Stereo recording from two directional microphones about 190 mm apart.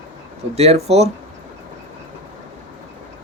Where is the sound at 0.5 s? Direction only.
35° right (ahead or behind).